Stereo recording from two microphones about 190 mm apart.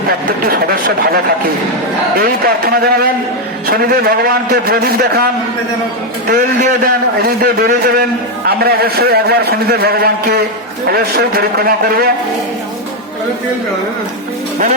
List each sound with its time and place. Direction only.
0.1 s a man's voice: 50° right (ahead or behind)